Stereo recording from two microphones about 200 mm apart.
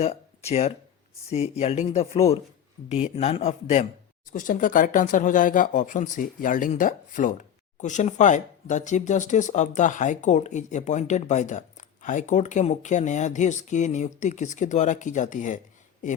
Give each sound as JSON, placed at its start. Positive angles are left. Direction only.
{"t": 0.0, "sound": "speech", "side_deg": 30}